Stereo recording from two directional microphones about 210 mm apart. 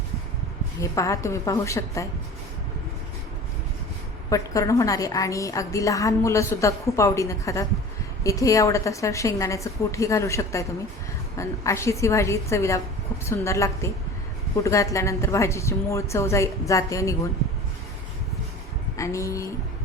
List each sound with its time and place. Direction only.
0.8 s a woman's voice: 15° left (ahead or behind)
4.3 s a woman's voice: 15° left (ahead or behind)
18.9 s a woman's voice: 15° left (ahead or behind)